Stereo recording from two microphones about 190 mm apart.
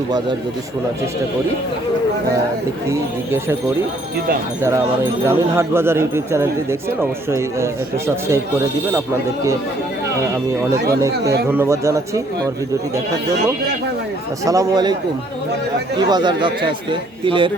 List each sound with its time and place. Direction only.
2.9 s speech: 15° right (ahead or behind)
5.2 s speech: 15° right (ahead or behind)
11.4 s speech: 10° right (ahead or behind)
14.4 s speech: 15° right (ahead or behind)
16.0 s a man's voice: 20° right (ahead or behind)